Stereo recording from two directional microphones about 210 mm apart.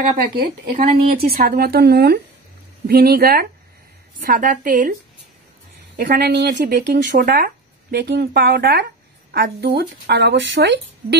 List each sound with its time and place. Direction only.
0.4 s a woman's voice: 45° right (ahead or behind)
5.9 s speech: 50° right (ahead or behind)